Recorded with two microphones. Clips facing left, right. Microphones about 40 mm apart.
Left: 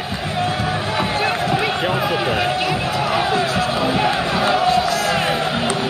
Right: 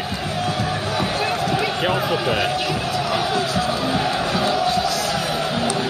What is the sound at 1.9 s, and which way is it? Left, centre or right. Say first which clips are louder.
Speech: left 1 dB; left.